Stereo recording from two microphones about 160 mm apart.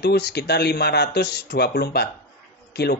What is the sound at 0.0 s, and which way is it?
Speech, 90° left.